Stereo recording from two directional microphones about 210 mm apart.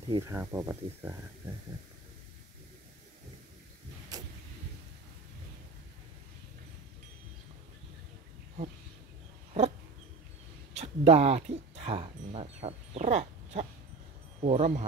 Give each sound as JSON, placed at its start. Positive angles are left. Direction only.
{"t": 0.1, "sound": "speech", "side_deg": -10}
{"t": 4.1, "sound": "vehicle", "side_deg": -15}
{"t": 10.7, "sound": "speech", "side_deg": -30}